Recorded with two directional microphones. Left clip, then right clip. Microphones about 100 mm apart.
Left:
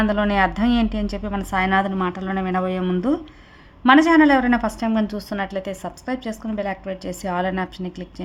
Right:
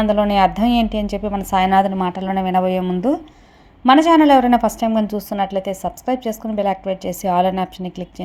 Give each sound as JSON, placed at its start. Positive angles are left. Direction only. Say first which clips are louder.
{"t": 0.1, "sound": "a woman's voice", "louder": "right 5 dB", "side_deg": -20}
{"t": 3.8, "sound": "a woman's voice", "louder": "right 3 dB", "side_deg": -25}